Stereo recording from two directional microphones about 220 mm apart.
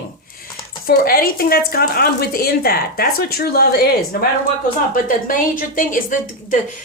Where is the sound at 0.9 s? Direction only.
40° left (ahead or behind).